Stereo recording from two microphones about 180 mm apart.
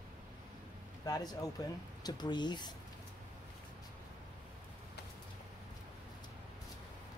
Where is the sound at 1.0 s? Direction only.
20° left (ahead or behind).